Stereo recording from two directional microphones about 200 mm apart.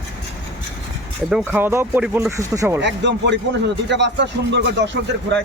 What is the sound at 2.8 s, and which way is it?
Speech, 60° right (ahead or behind).